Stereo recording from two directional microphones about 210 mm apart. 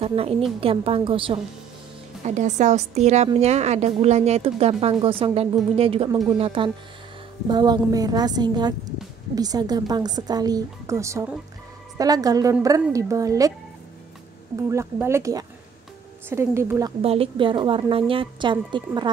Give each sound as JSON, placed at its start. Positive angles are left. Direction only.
{"t": 0.0, "sound": "speech", "side_deg": -25}
{"t": 2.2, "sound": "a woman's voice", "side_deg": -35}
{"t": 14.7, "sound": "a woman's voice", "side_deg": -15}
{"t": 17.0, "sound": "speech", "side_deg": -30}